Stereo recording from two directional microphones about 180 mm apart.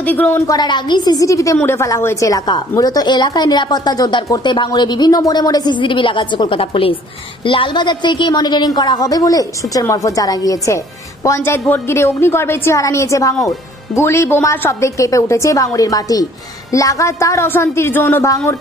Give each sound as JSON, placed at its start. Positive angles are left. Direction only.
{"t": 0.0, "sound": "a woman's voice", "side_deg": 10}
{"t": 0.6, "sound": "a woman's voice", "side_deg": 25}